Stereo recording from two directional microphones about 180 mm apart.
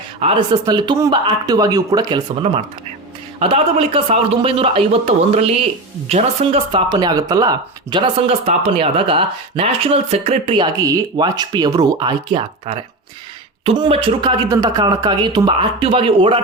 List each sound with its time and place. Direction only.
0.2 s speech: 30° right (ahead or behind)
3.4 s a man's voice: 30° right (ahead or behind)